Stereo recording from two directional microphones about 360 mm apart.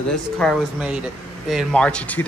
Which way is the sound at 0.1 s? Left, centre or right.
Centre.